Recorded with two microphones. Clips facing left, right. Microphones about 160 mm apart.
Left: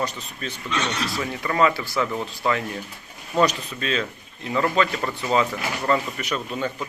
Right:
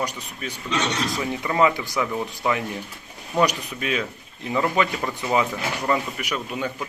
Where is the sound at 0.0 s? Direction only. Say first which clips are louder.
Left 1 dB; 10° right (ahead or behind).